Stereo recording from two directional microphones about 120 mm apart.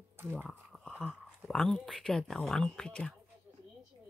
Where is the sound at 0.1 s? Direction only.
15° right (ahead or behind).